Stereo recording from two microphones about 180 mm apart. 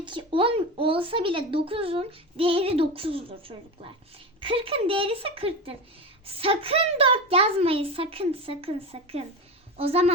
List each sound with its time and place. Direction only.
0.0 s speech: 25° right (ahead or behind)
4.4 s speech: 30° right (ahead or behind)